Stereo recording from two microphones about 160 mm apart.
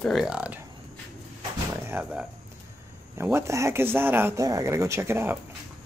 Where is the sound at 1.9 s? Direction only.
10° right (ahead or behind).